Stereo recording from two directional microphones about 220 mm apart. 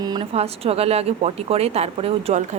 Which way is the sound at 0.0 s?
20° right (ahead or behind).